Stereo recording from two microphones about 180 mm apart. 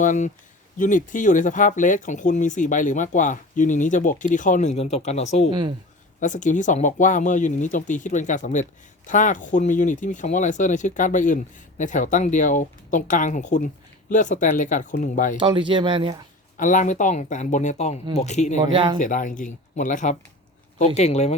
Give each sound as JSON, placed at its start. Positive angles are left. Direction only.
{"t": 0.0, "sound": "speech", "side_deg": 45}
{"t": 5.5, "sound": "speech", "side_deg": -25}
{"t": 6.1, "sound": "speech", "side_deg": 45}
{"t": 15.4, "sound": "speech", "side_deg": -25}
{"t": 16.6, "sound": "speech", "side_deg": 45}
{"t": 18.6, "sound": "speech", "side_deg": -30}
{"t": 18.9, "sound": "speech", "side_deg": 45}